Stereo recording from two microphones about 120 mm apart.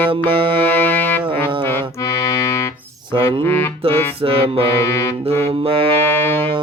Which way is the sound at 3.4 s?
20° left (ahead or behind).